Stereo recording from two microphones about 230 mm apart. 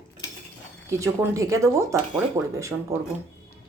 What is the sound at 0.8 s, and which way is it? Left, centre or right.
Speech, centre.